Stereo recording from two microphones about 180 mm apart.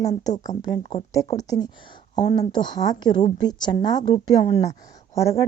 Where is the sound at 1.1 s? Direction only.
20° left (ahead or behind).